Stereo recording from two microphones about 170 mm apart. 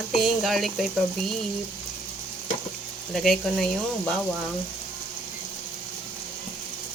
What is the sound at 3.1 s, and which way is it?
Speech, centre (ahead or behind).